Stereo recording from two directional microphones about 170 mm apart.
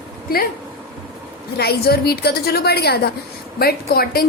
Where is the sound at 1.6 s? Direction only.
65° left (ahead or behind).